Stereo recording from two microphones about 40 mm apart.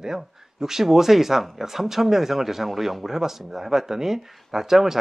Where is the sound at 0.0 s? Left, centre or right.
Centre.